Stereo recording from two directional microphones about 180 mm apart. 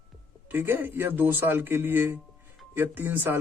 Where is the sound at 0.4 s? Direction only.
10° right (ahead or behind).